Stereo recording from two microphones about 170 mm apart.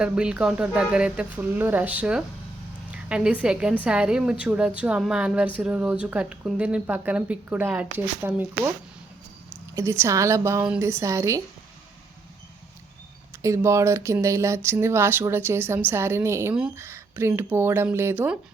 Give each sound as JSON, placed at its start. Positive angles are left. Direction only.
{"t": 0.0, "sound": "speech", "side_deg": -5}
{"t": 2.9, "sound": "a sound", "side_deg": -5}
{"t": 3.4, "sound": "a woman's voice", "side_deg": -5}
{"t": 9.7, "sound": "speech", "side_deg": -15}
{"t": 13.4, "sound": "speech", "side_deg": -15}